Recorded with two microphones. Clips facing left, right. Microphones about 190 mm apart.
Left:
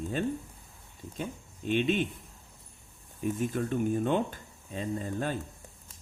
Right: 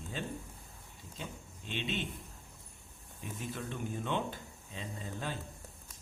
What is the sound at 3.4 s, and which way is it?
Speech, 50° left (ahead or behind).